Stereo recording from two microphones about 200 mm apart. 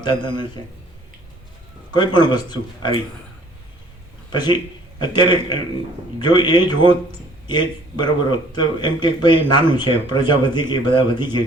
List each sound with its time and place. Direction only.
0.0 s a man's voice: 20° left (ahead or behind)
1.9 s a man's voice: 20° left (ahead or behind)
4.3 s a man's voice: 20° left (ahead or behind)